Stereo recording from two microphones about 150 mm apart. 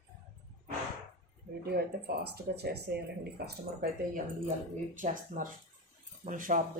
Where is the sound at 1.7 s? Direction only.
90° right; by 6.6 s 60° right (ahead or behind).